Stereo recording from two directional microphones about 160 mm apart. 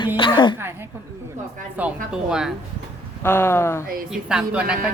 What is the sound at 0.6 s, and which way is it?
A woman's voice, 15° right (ahead or behind).